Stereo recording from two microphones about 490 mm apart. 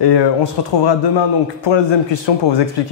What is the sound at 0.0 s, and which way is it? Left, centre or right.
A man's voice, left.